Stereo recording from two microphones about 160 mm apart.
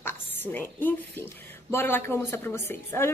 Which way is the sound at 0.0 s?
10° left (ahead or behind).